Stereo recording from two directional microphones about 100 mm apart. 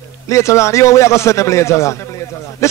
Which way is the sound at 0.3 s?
30° left (ahead or behind).